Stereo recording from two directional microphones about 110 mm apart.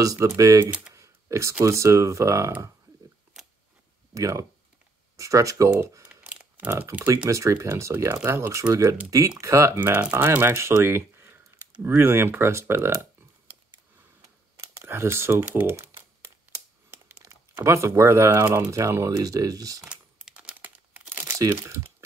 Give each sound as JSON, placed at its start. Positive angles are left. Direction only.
{"t": 0.0, "sound": "speech", "side_deg": -30}
{"t": 0.7, "sound": "speech", "side_deg": -10}
{"t": 0.9, "sound": "computer keyboard", "side_deg": -25}
{"t": 1.6, "sound": "speech", "side_deg": -25}
{"t": 3.4, "sound": "scissors", "side_deg": -5}
{"t": 4.1, "sound": "speech", "side_deg": -30}
{"t": 6.0, "sound": "a sound", "side_deg": -15}
{"t": 6.9, "sound": "speech", "side_deg": -15}
{"t": 7.2, "sound": "speech", "side_deg": -30}
{"t": 14.6, "sound": "computer keyboard", "side_deg": -25}
{"t": 16.9, "sound": "speech", "side_deg": -25}
{"t": 19.8, "sound": "crumpling", "side_deg": -10}